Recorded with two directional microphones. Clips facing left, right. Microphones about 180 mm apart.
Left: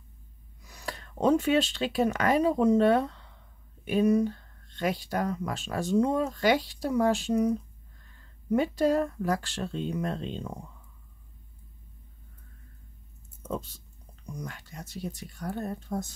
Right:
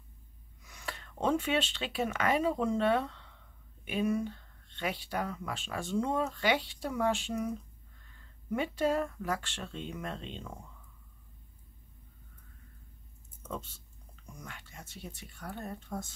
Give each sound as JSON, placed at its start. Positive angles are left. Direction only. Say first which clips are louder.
{"t": 0.6, "sound": "speech", "louder": "left 4 dB", "side_deg": 35}
{"t": 13.5, "sound": "speech", "louder": "left 6 dB", "side_deg": 40}